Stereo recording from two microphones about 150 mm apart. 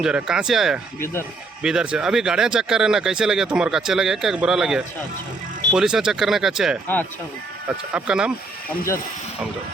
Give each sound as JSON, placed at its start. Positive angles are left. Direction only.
{"t": 0.0, "sound": "speech", "side_deg": -5}
{"t": 0.9, "sound": "speech", "side_deg": 15}
{"t": 1.6, "sound": "speech", "side_deg": -5}